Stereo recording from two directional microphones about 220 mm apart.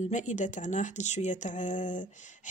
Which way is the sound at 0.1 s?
35° left (ahead or behind).